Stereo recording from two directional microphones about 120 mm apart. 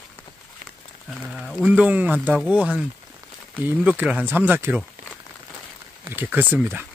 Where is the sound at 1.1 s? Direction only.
5° right (ahead or behind).